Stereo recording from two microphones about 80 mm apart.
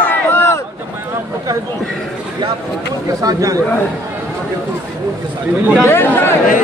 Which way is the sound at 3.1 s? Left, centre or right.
Right.